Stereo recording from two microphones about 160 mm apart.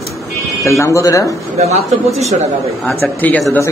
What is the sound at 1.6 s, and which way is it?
Speech, 45° right (ahead or behind).